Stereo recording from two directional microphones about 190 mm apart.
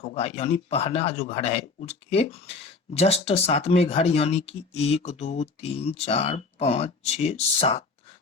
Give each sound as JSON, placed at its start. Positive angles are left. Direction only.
{"t": 0.0, "sound": "speech", "side_deg": 35}